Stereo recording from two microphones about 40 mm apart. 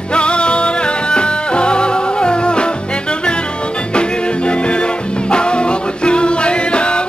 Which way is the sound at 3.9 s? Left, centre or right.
Left.